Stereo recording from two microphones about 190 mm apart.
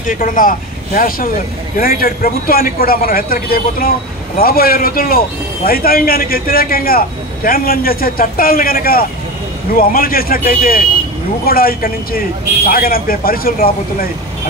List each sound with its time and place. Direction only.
0.0 s a man's voice: 45° left (ahead or behind)